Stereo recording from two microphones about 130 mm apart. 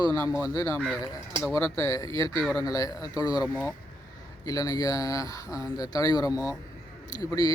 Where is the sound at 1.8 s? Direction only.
30° left (ahead or behind).